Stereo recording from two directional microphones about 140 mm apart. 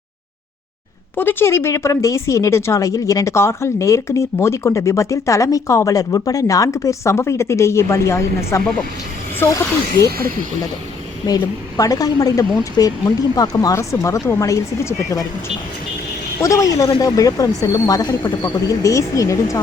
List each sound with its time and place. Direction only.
1.1 s speech: 15° left (ahead or behind)
11.3 s speech: 25° left (ahead or behind)
16.4 s speech: 25° left (ahead or behind)